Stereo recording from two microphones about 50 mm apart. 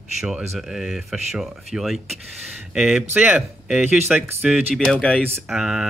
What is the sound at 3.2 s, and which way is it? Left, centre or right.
Speech, right.